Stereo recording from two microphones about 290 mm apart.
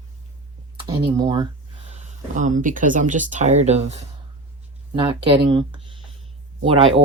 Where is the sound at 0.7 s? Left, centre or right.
Centre.